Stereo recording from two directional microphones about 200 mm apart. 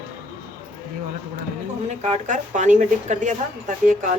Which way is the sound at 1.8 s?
35° right (ahead or behind).